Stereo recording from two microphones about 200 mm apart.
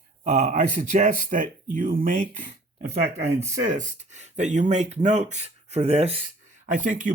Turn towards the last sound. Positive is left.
turn(degrees=-40)  # may be behind; listen again after turning